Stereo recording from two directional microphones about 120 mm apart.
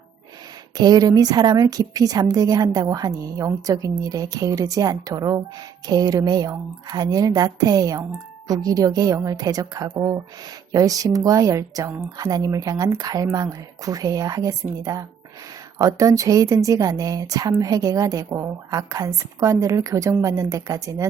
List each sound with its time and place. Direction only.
0.8 s a woman's voice: 35° right (ahead or behind)